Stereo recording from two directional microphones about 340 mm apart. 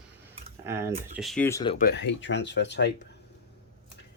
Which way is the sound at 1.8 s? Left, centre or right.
Left.